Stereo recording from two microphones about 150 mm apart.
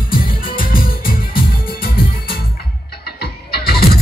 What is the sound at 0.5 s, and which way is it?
Music, 70° left (ahead or behind).